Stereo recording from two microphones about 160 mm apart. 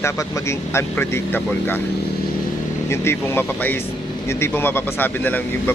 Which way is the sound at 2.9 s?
15° left (ahead or behind).